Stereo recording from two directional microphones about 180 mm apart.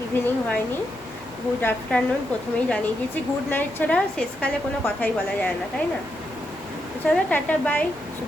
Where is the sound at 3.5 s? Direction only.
10° left (ahead or behind).